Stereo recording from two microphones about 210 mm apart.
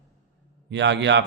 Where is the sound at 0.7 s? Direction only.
60° right (ahead or behind).